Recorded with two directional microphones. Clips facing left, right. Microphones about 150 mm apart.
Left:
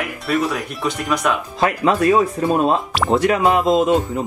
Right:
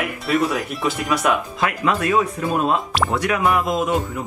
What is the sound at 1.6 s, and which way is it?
Speech, 35° left (ahead or behind).